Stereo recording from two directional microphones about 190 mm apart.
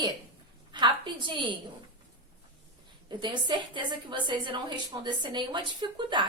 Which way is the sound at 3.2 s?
25° right (ahead or behind).